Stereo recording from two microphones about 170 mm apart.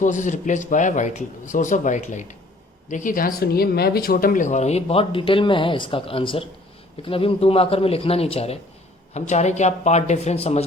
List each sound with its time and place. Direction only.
0.0 s a man's voice: 45° left (ahead or behind)